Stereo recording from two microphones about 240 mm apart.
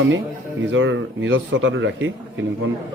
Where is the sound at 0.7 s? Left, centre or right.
Right.